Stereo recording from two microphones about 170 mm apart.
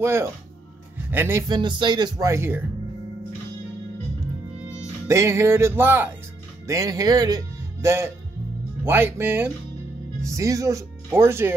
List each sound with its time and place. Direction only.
0.0 s speech: 15° right (ahead or behind)
1.5 s speech: 25° right (ahead or behind)
5.0 s speech: 15° right (ahead or behind)